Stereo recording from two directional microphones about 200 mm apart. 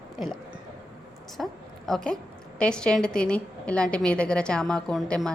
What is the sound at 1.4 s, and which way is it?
A woman's voice, centre (ahead or behind).